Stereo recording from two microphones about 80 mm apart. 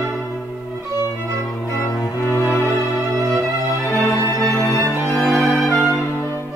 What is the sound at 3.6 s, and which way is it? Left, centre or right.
Music, left.